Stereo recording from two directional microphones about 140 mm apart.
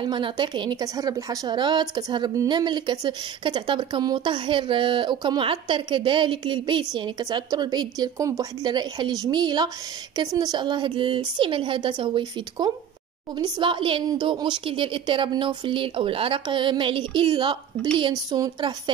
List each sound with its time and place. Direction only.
0.0 s a woman's voice: 35° right (ahead or behind)